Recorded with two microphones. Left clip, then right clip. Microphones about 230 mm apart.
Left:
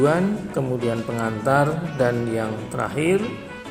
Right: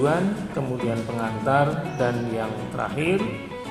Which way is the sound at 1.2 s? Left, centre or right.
Left.